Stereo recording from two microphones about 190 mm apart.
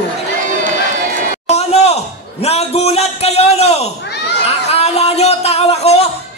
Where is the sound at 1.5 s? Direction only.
35° left (ahead or behind).